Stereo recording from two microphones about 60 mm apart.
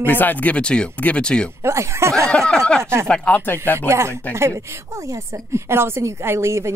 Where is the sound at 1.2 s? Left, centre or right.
Centre.